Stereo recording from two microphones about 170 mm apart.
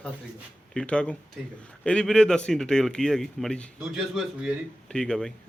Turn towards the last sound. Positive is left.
turn(degrees=5)  # may be behind; listen again after turning